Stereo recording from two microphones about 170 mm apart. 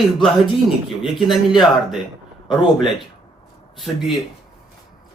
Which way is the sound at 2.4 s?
30° left (ahead or behind).